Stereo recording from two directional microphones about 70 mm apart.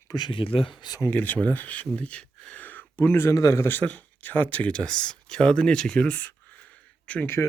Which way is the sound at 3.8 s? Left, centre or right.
Left.